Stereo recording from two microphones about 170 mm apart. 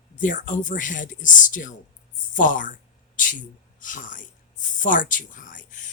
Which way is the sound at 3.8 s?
50° left (ahead or behind).